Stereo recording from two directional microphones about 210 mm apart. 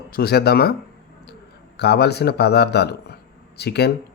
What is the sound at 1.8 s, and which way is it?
Speech, 50° left (ahead or behind).